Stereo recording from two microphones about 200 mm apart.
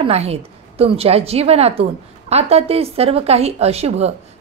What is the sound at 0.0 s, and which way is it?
A woman's voice, 30° right (ahead or behind).